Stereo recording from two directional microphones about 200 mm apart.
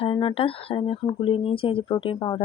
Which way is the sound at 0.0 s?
25° left (ahead or behind).